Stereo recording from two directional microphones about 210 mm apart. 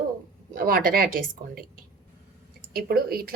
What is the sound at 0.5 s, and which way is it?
A woman's voice, 45° right (ahead or behind).